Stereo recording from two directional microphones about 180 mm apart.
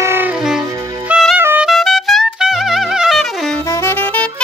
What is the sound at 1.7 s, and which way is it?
Music, centre (ahead or behind).